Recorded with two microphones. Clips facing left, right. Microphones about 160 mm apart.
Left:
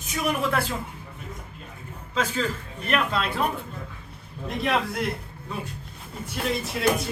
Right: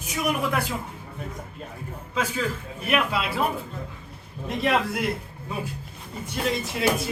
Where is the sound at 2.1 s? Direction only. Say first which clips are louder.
Left 1 dB; 10° right (ahead or behind).